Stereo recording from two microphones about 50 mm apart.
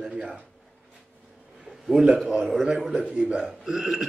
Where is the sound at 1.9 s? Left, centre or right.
Centre.